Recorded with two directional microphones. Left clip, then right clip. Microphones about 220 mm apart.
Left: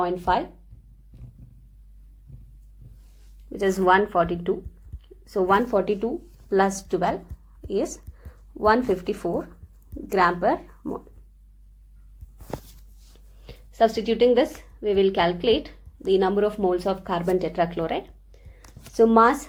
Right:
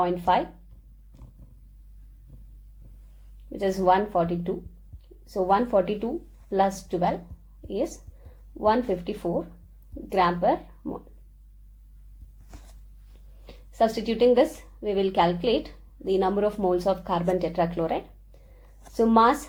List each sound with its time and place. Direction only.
0.0 s a woman's voice: 30° left (ahead or behind)
3.6 s a woman's voice: 25° left (ahead or behind)
8.5 s a woman's voice: 30° left (ahead or behind)
13.4 s a woman's voice: 25° left (ahead or behind)